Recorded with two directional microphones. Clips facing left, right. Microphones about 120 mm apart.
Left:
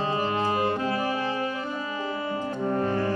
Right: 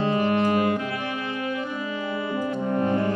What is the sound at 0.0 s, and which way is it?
Music, 30° left (ahead or behind).